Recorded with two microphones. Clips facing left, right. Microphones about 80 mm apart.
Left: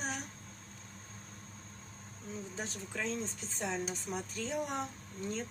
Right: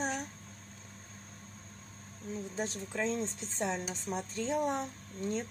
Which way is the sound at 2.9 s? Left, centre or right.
Right.